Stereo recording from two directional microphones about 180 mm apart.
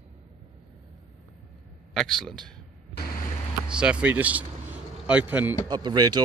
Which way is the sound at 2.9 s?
55° left (ahead or behind).